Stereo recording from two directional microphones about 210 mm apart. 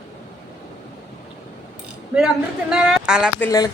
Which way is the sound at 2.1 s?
5° right (ahead or behind).